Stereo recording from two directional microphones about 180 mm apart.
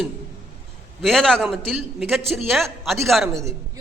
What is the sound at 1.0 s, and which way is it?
A man's voice, centre (ahead or behind).